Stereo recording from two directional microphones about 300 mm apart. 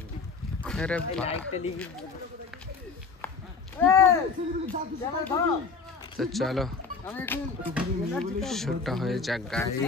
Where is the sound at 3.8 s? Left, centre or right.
Centre.